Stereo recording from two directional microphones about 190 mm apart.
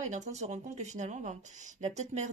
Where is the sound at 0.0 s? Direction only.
40° right (ahead or behind).